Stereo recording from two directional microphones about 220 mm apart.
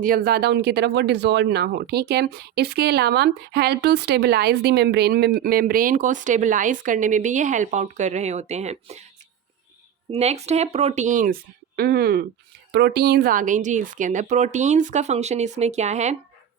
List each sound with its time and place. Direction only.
0.0 s speech: 45° right (ahead or behind)
10.1 s speech: 30° right (ahead or behind)